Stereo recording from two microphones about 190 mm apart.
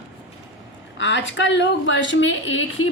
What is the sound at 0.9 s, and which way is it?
A woman's voice, 75° left (ahead or behind).